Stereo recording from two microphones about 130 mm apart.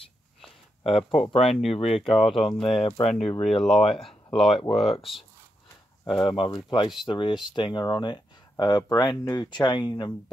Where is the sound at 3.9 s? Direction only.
45° left (ahead or behind).